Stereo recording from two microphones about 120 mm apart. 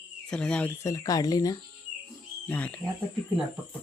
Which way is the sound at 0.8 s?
30° left (ahead or behind).